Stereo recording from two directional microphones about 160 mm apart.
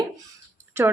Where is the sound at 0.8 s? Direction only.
15° right (ahead or behind).